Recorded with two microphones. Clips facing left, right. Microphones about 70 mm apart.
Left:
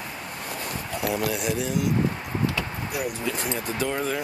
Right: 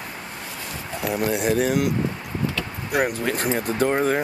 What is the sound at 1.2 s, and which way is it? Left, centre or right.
Speech, right.